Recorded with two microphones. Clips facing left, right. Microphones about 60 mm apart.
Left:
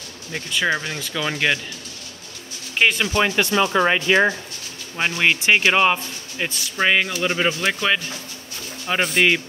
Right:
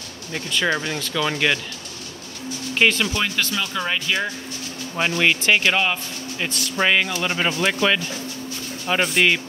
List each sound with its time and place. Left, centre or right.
0.3 s speech: centre
2.8 s speech: centre
3.2 s speech: left
4.9 s speech: centre